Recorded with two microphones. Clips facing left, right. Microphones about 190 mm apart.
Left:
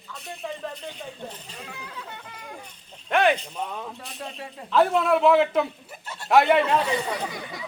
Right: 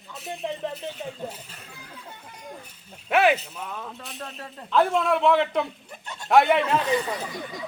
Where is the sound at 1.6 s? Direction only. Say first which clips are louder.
Left 5 dB; 75° left (ahead or behind).